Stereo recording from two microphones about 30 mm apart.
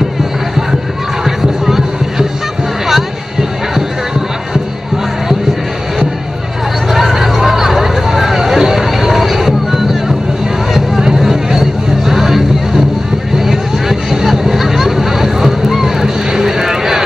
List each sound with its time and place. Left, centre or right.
1.2 s music: centre
6.9 s a sound: centre
7.4 s hubbub: centre
10.7 s music: centre
13.4 s vehicle: centre
14.2 s boat: centre
16.3 s vehicle: centre